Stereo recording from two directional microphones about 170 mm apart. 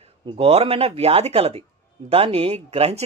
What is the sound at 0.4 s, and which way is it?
A man's voice, 35° right (ahead or behind).